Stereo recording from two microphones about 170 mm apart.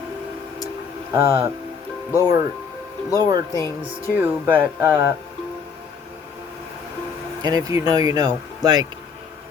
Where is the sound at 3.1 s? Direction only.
20° right (ahead or behind).